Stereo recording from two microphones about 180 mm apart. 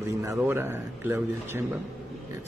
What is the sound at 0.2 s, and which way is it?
A man's voice, 15° right (ahead or behind).